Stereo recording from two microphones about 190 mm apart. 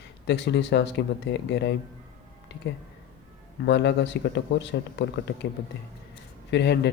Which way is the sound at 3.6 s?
65° left (ahead or behind).